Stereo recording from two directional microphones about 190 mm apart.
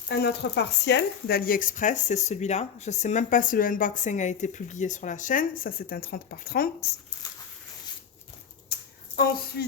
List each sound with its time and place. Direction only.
0.1 s speech: 60° left (ahead or behind)
9.1 s a woman's voice: 55° left (ahead or behind)